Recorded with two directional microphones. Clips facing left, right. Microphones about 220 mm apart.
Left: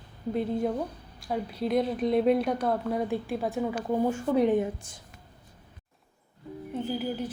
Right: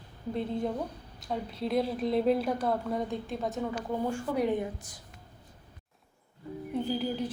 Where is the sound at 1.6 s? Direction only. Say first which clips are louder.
Left 3 dB; centre (ahead or behind).